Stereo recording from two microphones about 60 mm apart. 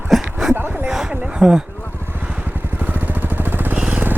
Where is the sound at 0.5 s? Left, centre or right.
Right.